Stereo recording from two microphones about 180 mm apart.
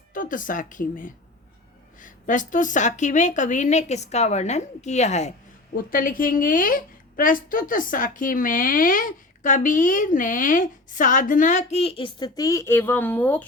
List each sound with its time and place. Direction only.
0.1 s a woman's voice: 50° left (ahead or behind)
5.7 s a woman's voice: 50° left (ahead or behind); by 13.4 s 10° left (ahead or behind)